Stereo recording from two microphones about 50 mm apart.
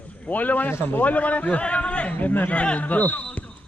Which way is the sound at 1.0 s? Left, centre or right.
Left.